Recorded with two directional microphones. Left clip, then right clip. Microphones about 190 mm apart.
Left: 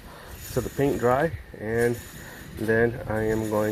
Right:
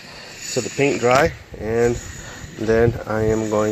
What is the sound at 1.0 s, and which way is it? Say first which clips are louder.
Speech: right 8 dB; 15° right (ahead or behind).